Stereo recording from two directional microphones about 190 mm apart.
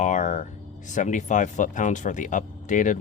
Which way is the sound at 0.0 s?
40° left (ahead or behind).